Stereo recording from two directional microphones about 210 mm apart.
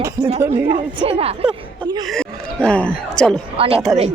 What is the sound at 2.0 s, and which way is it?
Speech, centre (ahead or behind).